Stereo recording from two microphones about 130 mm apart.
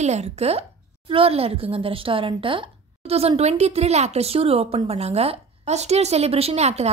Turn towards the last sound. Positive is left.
turn(degrees=-55)  # may be behind; listen again after turning